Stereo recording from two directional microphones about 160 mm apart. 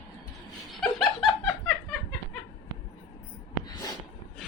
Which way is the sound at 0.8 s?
Centre (ahead or behind).